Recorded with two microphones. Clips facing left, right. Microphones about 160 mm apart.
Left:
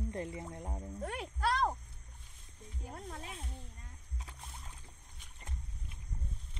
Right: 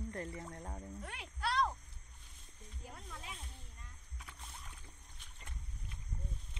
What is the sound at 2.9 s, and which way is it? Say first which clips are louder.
Music: left 6 dB; 50° left (ahead or behind).